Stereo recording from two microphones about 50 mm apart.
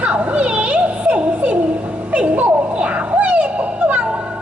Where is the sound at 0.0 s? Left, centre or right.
Right.